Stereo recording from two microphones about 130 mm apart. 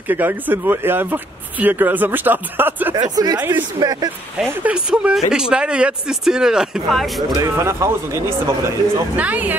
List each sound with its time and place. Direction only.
0.1 s speech: 15° right (ahead or behind)
3.2 s speech: 30° right (ahead or behind)
4.5 s speech: 10° right (ahead or behind)
7.3 s speech: 25° right (ahead or behind)